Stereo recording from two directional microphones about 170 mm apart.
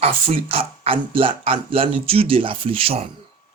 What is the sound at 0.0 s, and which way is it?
Speech, 35° right (ahead or behind).